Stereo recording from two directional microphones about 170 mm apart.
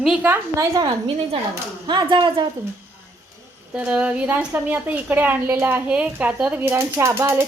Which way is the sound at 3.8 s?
5° right (ahead or behind).